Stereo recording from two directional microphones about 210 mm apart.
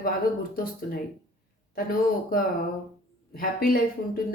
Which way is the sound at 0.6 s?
45° left (ahead or behind).